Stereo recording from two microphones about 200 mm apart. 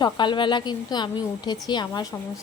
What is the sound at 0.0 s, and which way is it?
A woman's voice, 25° left (ahead or behind).